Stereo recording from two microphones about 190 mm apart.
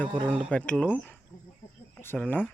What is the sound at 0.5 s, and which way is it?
Speech, 5° left (ahead or behind).